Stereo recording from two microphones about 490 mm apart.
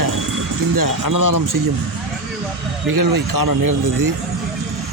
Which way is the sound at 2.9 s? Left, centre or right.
Right.